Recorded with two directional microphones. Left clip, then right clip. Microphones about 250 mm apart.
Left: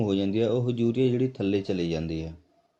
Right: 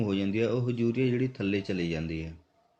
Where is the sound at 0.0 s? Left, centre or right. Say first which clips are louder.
Left 3 dB; centre.